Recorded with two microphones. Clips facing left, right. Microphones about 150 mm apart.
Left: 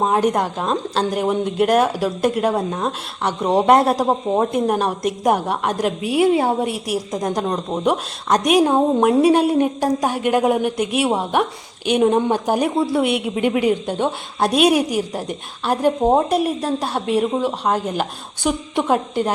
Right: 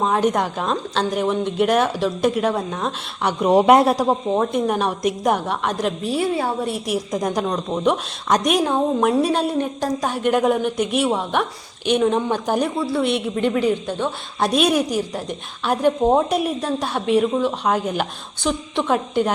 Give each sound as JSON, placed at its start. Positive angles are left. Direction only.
{"t": 0.1, "sound": "speech", "side_deg": 5}
{"t": 3.4, "sound": "a man's voice", "side_deg": -5}
{"t": 3.9, "sound": "a woman's voice", "side_deg": 10}
{"t": 6.8, "sound": "speech", "side_deg": 0}
{"t": 8.6, "sound": "a woman's voice", "side_deg": 15}